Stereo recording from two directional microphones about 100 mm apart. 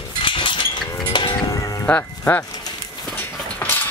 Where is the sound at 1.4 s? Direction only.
35° left (ahead or behind).